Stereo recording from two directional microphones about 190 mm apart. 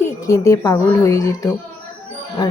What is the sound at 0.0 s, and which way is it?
A woman's voice, 15° left (ahead or behind).